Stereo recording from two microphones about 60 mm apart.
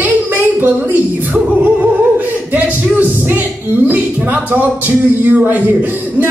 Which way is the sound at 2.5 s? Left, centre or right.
Right.